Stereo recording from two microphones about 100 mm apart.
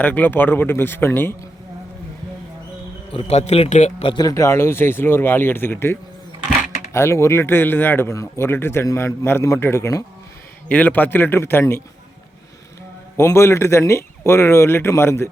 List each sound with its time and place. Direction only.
0.0 s speech: 15° left (ahead or behind)
3.1 s a man's voice: 80° left
4.1 s speech: 40° left (ahead or behind)
10.7 s speech: 15° left (ahead or behind)
13.1 s speech: 25° left (ahead or behind)